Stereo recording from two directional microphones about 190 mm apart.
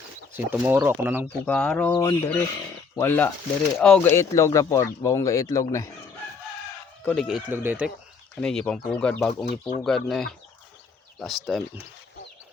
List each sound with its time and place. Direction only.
0.3 s speech: 10° right (ahead or behind)
1.3 s speech: 5° left (ahead or behind)
1.9 s speech: 15° left (ahead or behind)
7.0 s speech: 5° left (ahead or behind)
7.3 s speech: 5° right (ahead or behind)
8.4 s speech: 5° left (ahead or behind)